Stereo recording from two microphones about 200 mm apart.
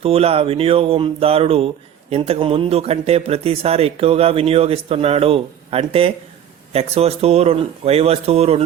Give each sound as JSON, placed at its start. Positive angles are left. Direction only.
{"t": 0.0, "sound": "speech", "side_deg": -30}